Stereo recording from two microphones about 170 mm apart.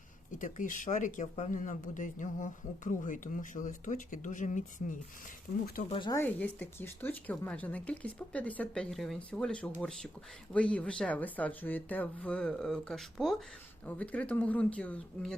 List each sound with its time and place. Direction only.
0.3 s speech: 50° left (ahead or behind)
5.9 s speech: 30° left (ahead or behind)
6.1 s speech: 10° left (ahead or behind)